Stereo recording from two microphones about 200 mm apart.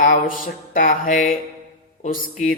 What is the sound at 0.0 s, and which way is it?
Mantra, 45° left (ahead or behind).